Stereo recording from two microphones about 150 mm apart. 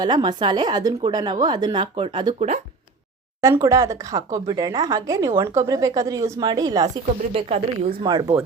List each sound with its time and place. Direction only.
0.0 s a woman's voice: 30° right (ahead or behind)
3.4 s a woman's voice: 20° right (ahead or behind)
7.3 s a woman's voice: 40° right (ahead or behind)
8.0 s a woman's voice: 30° right (ahead or behind)